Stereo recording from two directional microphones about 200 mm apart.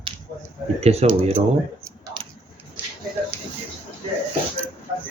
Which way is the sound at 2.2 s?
25° right (ahead or behind).